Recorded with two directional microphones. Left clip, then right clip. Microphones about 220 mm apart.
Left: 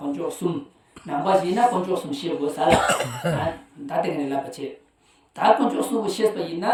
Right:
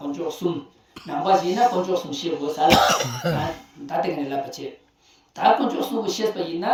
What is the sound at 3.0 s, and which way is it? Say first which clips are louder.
Cough: right 1 dB; 10° right (ahead or behind).